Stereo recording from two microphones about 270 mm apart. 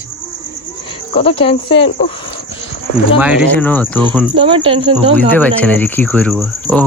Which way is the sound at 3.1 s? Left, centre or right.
Centre.